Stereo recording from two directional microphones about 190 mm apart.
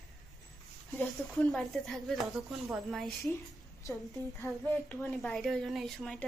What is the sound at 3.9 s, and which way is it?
A woman's voice, 15° left (ahead or behind).